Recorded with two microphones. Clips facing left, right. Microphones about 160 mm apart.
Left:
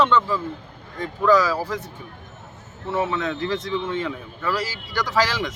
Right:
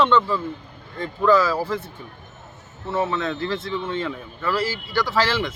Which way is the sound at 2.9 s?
15° left (ahead or behind).